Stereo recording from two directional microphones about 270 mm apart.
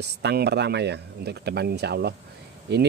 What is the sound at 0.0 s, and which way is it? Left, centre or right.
Speech, right.